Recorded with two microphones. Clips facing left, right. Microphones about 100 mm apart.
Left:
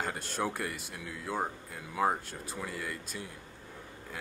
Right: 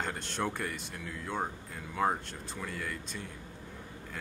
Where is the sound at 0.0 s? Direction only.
5° left (ahead or behind).